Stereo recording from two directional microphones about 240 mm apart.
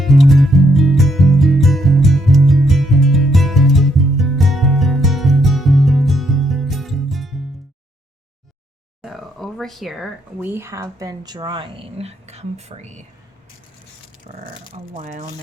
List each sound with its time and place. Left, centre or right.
0.0 s music: centre
9.0 s speech: centre; by 13.1 s right
14.3 s speech: right